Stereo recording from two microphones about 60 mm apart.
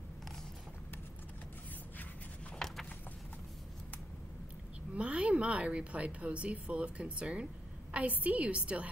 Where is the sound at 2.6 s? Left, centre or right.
Centre.